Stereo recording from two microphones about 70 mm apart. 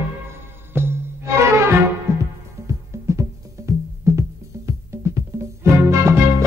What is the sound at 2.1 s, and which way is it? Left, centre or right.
Music, right.